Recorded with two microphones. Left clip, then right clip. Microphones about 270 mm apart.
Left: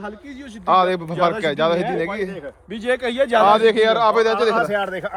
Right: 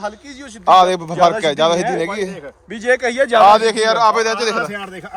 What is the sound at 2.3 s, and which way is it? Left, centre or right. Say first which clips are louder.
Speech: right 1 dB; right.